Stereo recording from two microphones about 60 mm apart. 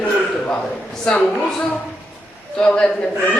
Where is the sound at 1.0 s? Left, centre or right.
Centre.